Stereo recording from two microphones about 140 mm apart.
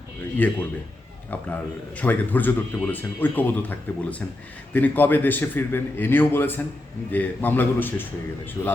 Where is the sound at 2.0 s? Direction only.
10° left (ahead or behind).